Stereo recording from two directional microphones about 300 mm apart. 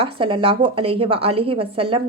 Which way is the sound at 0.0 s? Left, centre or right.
Centre.